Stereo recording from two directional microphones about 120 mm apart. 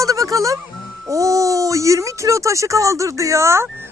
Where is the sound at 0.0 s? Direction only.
30° right (ahead or behind).